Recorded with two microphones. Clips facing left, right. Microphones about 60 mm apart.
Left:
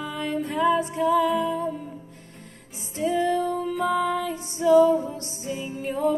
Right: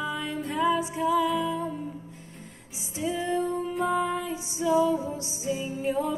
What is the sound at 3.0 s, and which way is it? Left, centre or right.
Music, left.